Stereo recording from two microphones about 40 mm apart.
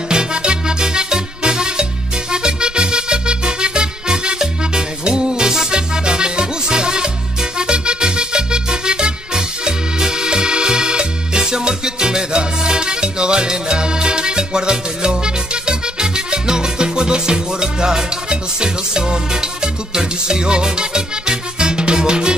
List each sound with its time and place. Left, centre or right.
0.1 s music: right